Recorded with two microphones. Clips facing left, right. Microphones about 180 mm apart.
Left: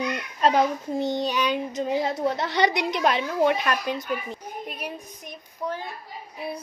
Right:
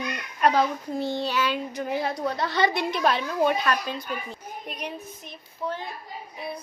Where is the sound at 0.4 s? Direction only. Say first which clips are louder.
Left 1 dB; 25° left (ahead or behind).